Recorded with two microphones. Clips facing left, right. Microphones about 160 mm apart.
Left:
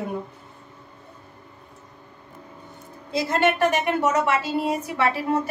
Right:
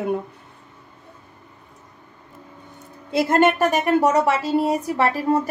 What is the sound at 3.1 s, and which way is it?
A woman's voice, 55° right (ahead or behind).